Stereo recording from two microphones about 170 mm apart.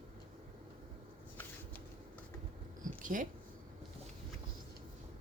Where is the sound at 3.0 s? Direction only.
50° right (ahead or behind).